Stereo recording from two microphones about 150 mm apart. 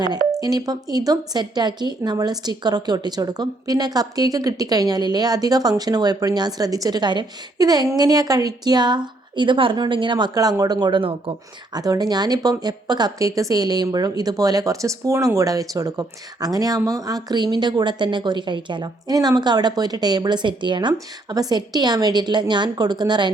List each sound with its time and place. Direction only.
0.0 s speech: 25° right (ahead or behind)